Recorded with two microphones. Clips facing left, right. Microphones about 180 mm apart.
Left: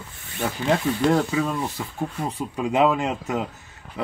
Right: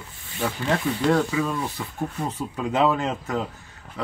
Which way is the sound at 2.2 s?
15° left (ahead or behind).